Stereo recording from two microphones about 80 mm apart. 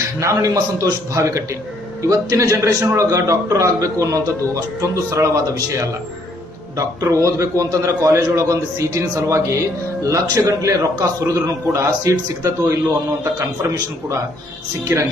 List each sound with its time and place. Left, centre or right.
0.2 s a man's voice: right
14.9 s a man's voice: right